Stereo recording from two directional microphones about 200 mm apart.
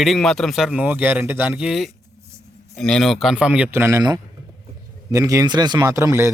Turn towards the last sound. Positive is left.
turn(degrees=-15)  # may be behind; listen again after turning